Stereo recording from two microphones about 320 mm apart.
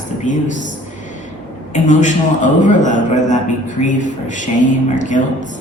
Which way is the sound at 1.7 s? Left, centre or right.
Left.